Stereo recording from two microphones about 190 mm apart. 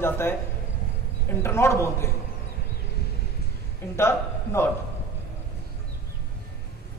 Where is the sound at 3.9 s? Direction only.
15° left (ahead or behind).